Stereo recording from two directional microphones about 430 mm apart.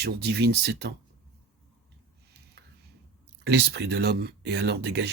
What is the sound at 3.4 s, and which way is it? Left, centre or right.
Speech, right.